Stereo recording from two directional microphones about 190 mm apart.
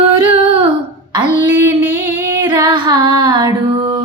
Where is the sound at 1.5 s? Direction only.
15° right (ahead or behind).